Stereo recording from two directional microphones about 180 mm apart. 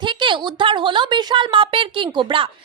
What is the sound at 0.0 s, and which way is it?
A woman's voice, 25° right (ahead or behind).